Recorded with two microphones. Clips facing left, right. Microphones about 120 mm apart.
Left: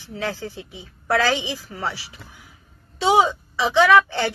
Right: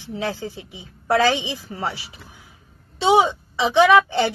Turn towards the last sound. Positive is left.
turn(degrees=-20)  # may be behind; listen again after turning